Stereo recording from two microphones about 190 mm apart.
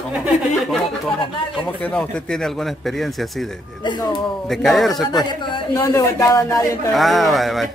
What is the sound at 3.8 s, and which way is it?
Speech, 25° left (ahead or behind).